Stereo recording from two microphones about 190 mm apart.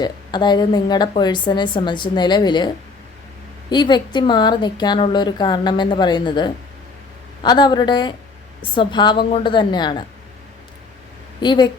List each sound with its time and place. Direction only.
0.0 s a woman's voice: 20° left (ahead or behind)
11.3 s a woman's voice: 25° left (ahead or behind)